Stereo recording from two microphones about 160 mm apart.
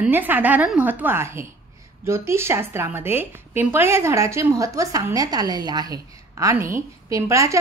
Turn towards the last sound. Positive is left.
turn(degrees=-20)  # may be behind; listen again after turning